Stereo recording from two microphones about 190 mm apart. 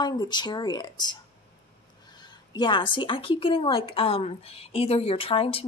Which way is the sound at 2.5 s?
25° left (ahead or behind).